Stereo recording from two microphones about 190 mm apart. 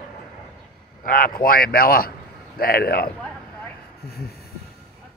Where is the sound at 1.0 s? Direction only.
45° left (ahead or behind).